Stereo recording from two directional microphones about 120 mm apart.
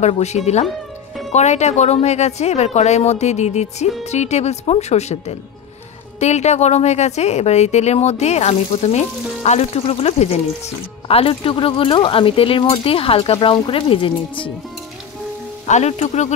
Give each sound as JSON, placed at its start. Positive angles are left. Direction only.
{"t": 0.0, "sound": "speech", "side_deg": 70}
{"t": 11.1, "sound": "speech", "side_deg": 50}
{"t": 15.6, "sound": "speech", "side_deg": 70}